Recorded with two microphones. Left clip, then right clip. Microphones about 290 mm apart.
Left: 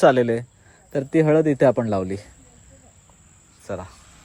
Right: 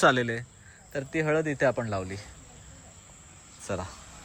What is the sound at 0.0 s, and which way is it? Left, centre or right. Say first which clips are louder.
Speech: left 7 dB; centre.